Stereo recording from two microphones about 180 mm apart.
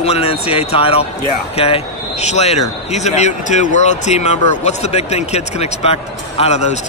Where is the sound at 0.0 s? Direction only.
35° left (ahead or behind).